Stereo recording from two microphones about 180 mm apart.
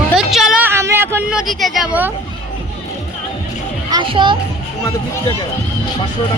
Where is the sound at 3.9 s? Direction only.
25° right (ahead or behind).